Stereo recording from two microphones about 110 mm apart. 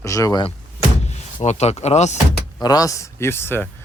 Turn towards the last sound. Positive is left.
turn(degrees=20)  # may be behind; listen again after turning